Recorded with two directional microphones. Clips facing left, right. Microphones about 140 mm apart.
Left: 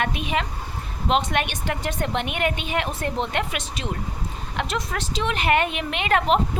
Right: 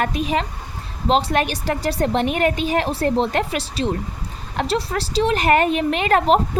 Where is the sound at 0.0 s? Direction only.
40° right (ahead or behind).